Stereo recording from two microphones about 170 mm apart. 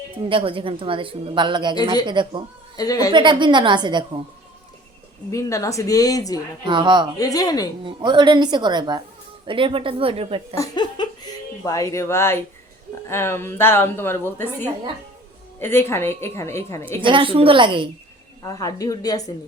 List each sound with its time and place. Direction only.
0.3 s a woman's voice: 30° right (ahead or behind)
2.7 s speech: 20° left (ahead or behind)
3.1 s a woman's voice: 30° right (ahead or behind)
5.3 s speech: 20° left (ahead or behind)
6.7 s a woman's voice: 30° right (ahead or behind)
7.2 s speech: 20° left (ahead or behind)
7.9 s a woman's voice: 25° right (ahead or behind)
10.5 s a woman's voice: 20° left (ahead or behind)
17.0 s a woman's voice: 30° right (ahead or behind)
18.4 s speech: 20° left (ahead or behind)